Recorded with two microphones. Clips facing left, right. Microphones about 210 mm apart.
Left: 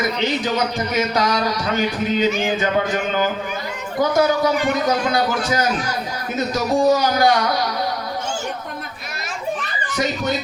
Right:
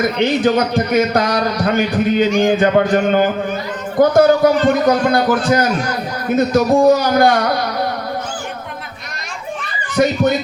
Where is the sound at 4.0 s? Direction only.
55° right (ahead or behind).